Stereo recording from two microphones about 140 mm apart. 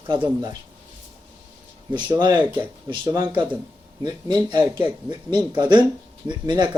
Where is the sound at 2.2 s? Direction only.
30° right (ahead or behind).